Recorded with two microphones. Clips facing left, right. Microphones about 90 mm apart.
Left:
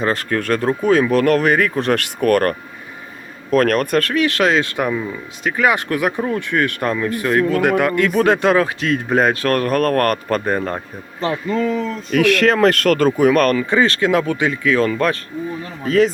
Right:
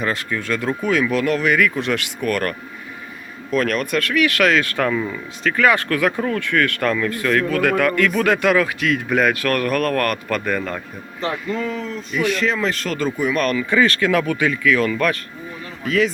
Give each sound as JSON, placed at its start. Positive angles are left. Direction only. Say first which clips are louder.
{"t": 0.0, "sound": "speech", "louder": "left 4 dB", "side_deg": 40}
{"t": 0.3, "sound": "speech", "louder": "left 5 dB", "side_deg": 55}
{"t": 0.6, "sound": "speech", "louder": "left 4 dB", "side_deg": 40}
{"t": 12.1, "sound": "speech", "louder": "left 6 dB", "side_deg": 75}
{"t": 12.5, "sound": "speech", "louder": "left 8 dB", "side_deg": 55}
{"t": 13.7, "sound": "a man's voice", "louder": "left 1 dB", "side_deg": 30}